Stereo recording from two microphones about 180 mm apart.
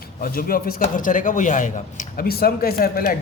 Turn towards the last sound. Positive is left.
turn(degrees=50)  # may be behind; listen again after turning